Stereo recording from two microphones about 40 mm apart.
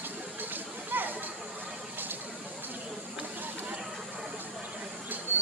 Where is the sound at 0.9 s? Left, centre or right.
Right.